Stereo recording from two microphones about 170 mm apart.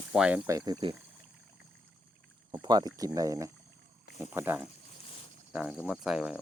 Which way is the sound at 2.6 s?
25° right (ahead or behind).